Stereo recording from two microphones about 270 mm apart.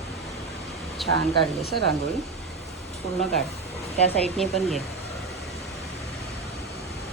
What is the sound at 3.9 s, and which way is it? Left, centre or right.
Speech, left.